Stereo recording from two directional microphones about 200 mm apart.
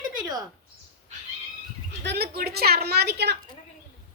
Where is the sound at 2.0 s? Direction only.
55° right (ahead or behind).